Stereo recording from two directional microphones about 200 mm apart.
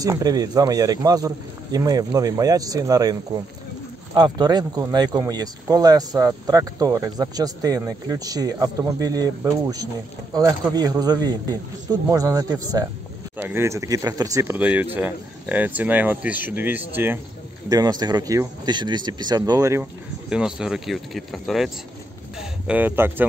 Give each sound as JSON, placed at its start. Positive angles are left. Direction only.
{"t": 0.0, "sound": "speech", "side_deg": -20}